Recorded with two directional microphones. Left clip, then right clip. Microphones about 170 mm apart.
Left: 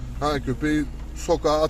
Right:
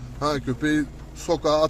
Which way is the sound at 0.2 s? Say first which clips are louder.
Even; 10° right (ahead or behind).